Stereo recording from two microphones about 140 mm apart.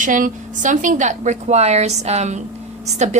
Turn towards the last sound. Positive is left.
turn(degrees=-55)  # may be behind; listen again after turning